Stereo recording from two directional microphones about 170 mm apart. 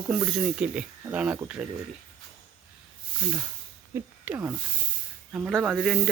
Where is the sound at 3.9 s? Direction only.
10° right (ahead or behind).